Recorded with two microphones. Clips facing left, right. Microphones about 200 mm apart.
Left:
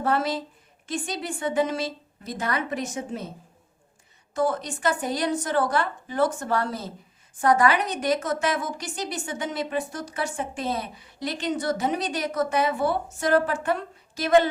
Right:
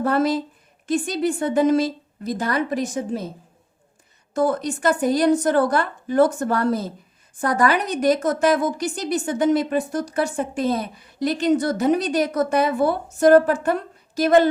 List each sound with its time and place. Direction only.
0.0 s a woman's voice: 40° right (ahead or behind)
4.4 s a woman's voice: 45° right (ahead or behind)